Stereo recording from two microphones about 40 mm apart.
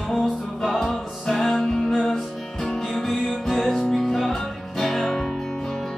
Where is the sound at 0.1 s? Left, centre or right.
Centre.